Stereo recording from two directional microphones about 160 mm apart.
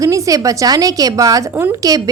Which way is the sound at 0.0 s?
20° right (ahead or behind).